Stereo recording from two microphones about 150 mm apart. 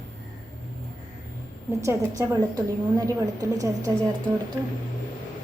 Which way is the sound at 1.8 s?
20° right (ahead or behind).